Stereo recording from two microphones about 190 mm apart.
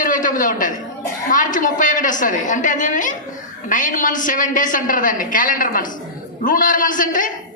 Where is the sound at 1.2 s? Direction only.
45° left (ahead or behind).